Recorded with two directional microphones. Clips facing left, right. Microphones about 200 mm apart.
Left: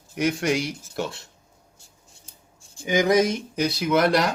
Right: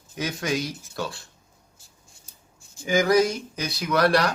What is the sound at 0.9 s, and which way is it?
Speech, 25° left (ahead or behind).